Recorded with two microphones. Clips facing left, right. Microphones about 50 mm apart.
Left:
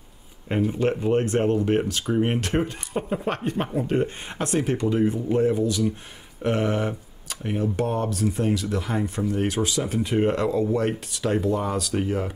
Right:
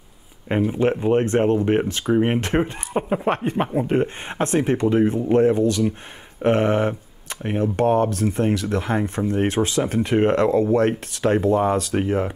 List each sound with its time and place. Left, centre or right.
0.5 s speech: centre; by 5.9 s right
6.4 s speech: right